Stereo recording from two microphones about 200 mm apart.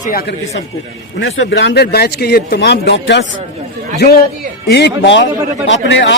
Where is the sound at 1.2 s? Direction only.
75° left (ahead or behind).